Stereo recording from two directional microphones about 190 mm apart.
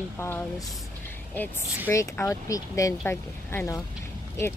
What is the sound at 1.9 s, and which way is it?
Speech, 15° left (ahead or behind).